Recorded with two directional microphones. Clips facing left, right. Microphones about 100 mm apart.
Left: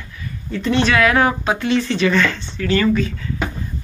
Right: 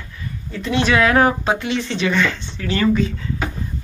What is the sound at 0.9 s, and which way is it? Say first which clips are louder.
Speech: even; 30° right (ahead or behind).